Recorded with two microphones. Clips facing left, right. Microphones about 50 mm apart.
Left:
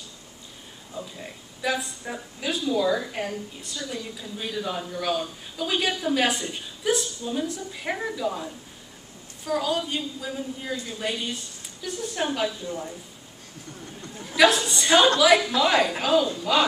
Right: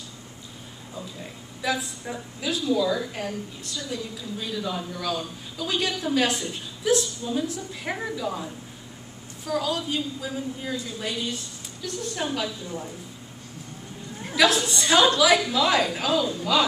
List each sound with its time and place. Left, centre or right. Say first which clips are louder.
1.2 s a woman's voice: even; centre
4.4 s a man's voice: left 1 dB; centre
9.5 s a woman's voice: left 1 dB; centre
12.2 s a woman's voice: left 3 dB; centre
14.3 s a woman's voice: left 2 dB; centre